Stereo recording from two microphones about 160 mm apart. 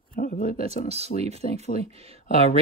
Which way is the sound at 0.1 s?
60° left (ahead or behind).